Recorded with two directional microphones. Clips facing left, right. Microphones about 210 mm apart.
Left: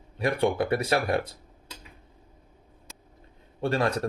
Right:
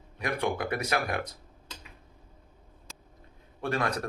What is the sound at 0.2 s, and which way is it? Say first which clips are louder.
Speech: left 5 dB; 30° left (ahead or behind).